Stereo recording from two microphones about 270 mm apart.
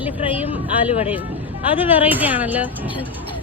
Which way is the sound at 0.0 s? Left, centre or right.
Centre.